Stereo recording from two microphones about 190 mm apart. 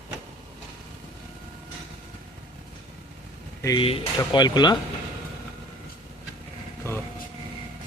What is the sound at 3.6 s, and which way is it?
Speech, 25° left (ahead or behind).